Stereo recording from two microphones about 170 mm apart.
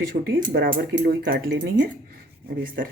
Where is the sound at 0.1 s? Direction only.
55° right (ahead or behind).